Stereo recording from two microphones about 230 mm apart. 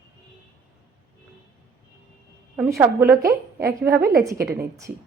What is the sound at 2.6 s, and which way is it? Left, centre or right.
A woman's voice, centre.